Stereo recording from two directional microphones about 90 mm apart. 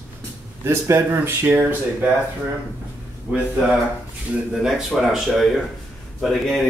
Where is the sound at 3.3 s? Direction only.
15° right (ahead or behind).